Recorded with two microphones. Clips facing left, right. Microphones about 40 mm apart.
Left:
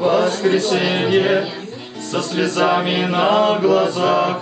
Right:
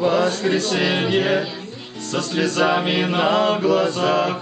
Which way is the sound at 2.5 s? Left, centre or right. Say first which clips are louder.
Left 2 dB; centre.